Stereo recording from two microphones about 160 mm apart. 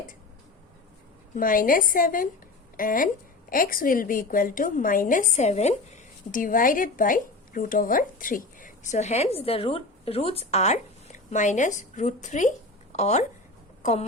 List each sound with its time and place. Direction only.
1.4 s a woman's voice: 60° left (ahead or behind)